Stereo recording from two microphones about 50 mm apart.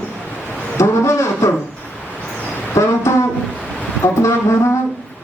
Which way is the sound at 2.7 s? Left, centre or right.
Left.